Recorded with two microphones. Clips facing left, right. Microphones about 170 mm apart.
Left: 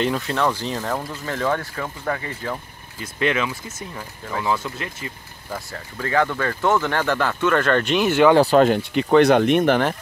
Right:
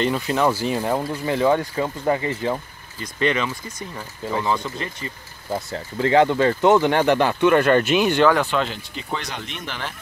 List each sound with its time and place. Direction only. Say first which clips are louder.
0.0 s speech: right 1 dB; 5° right (ahead or behind); by 2.6 s 20° right (ahead or behind)
3.0 s speech: even; 5° left (ahead or behind)
5.5 s speech: right 5 dB; 25° right (ahead or behind); by 8.3 s 5° left (ahead or behind)
8.4 s speech: left 8 dB; 45° left (ahead or behind)